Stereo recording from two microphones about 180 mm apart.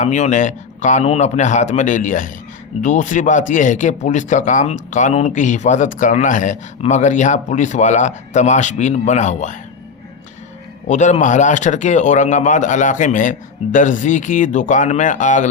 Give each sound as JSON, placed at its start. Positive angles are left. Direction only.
{"t": 0.0, "sound": "speech", "side_deg": 40}
{"t": 10.8, "sound": "speech", "side_deg": 40}